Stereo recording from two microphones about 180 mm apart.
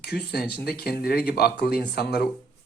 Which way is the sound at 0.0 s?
65° left (ahead or behind).